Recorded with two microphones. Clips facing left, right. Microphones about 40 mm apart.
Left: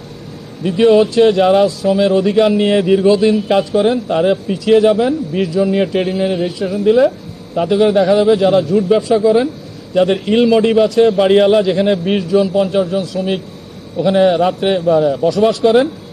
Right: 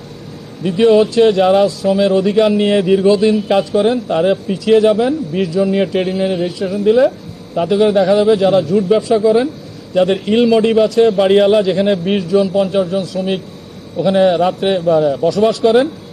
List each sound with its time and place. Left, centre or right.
0.6 s speech: centre